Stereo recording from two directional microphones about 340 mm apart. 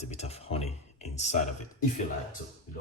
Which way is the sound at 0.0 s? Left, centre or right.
Centre.